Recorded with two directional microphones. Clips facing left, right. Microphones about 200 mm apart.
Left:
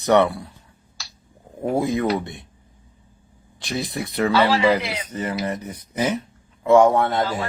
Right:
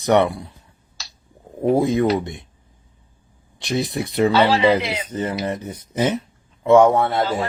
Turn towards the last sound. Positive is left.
turn(degrees=-5)  # may be behind; listen again after turning